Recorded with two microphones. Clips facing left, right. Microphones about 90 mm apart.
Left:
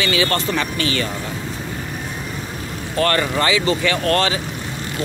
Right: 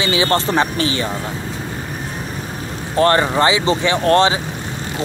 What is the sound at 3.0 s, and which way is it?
Speech, 25° right (ahead or behind).